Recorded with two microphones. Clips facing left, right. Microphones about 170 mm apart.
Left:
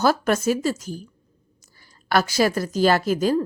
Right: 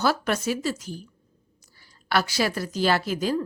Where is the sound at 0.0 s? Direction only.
45° left (ahead or behind).